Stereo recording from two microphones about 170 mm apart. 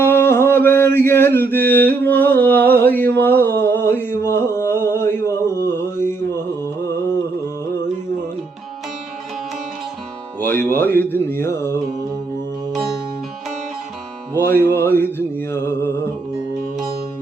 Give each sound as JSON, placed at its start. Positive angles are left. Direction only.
{"t": 0.0, "sound": "mantra", "side_deg": 15}
{"t": 3.2, "sound": "a sound", "side_deg": 10}
{"t": 10.4, "sound": "music", "side_deg": 15}
{"t": 14.3, "sound": "music", "side_deg": 10}
{"t": 15.5, "sound": "mantra", "side_deg": 15}